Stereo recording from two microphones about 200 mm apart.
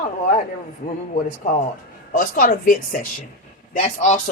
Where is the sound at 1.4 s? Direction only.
45° left (ahead or behind).